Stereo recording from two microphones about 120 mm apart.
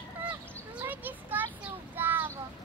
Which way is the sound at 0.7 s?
15° right (ahead or behind).